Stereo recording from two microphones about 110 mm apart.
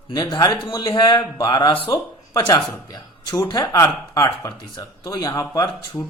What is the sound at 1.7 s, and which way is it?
Speech, 55° left (ahead or behind).